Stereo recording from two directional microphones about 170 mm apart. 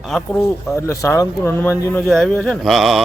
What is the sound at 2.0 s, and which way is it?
Speech, centre (ahead or behind).